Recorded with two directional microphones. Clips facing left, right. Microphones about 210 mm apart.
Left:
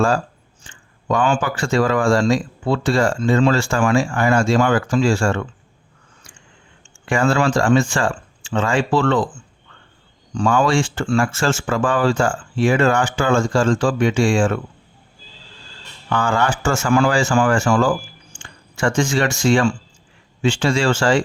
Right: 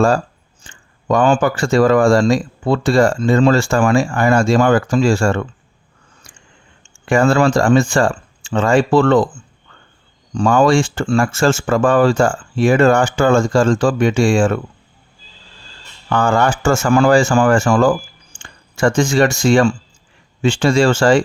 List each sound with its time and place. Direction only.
0.6 s speech: 45° right (ahead or behind)
7.0 s speech: 45° right (ahead or behind)
10.3 s speech: 40° right (ahead or behind)
16.1 s speech: 45° right (ahead or behind)